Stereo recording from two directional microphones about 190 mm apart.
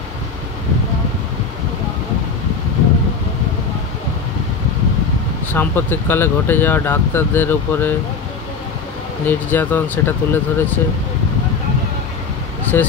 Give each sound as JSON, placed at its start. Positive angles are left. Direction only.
{"t": 5.5, "sound": "speech", "side_deg": 10}
{"t": 9.2, "sound": "speech", "side_deg": 10}
{"t": 12.7, "sound": "speech", "side_deg": 10}